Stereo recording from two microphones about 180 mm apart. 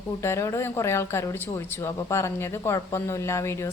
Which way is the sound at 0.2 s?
15° left (ahead or behind).